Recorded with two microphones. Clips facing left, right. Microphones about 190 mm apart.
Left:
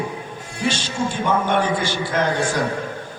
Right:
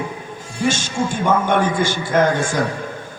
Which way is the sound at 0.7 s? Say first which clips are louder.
Right 2 dB; 45° right (ahead or behind).